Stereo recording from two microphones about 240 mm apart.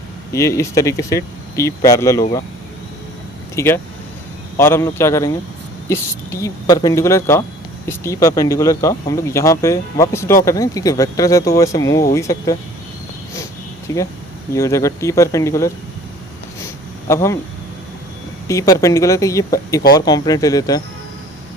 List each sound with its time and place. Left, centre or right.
0.3 s speech: centre
3.5 s speech: centre
13.3 s a sound: centre
14.5 s speech: centre
17.1 s speech: centre
18.4 s speech: centre